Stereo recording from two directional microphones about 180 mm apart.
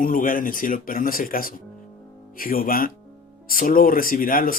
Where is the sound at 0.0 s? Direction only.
50° left (ahead or behind).